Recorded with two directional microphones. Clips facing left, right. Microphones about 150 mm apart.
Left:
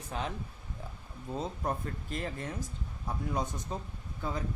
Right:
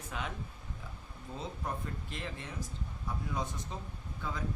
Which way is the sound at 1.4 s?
45° left (ahead or behind).